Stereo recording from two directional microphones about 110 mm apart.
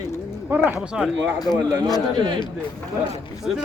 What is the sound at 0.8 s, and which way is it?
Speech, 5° right (ahead or behind).